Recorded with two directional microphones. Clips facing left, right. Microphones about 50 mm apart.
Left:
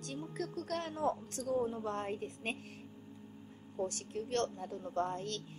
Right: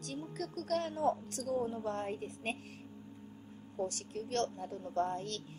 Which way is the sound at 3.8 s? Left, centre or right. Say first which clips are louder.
Even; left.